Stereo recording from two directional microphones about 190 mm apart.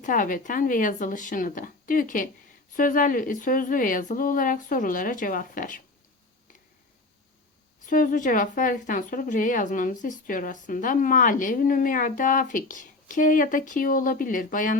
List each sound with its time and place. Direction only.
0.0 s a woman's voice: 45° left (ahead or behind)
7.9 s a woman's voice: 45° left (ahead or behind)